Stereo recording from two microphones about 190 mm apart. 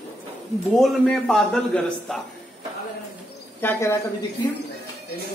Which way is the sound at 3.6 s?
15° left (ahead or behind).